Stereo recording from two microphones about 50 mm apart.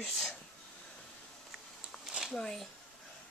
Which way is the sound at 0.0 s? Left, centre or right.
Centre.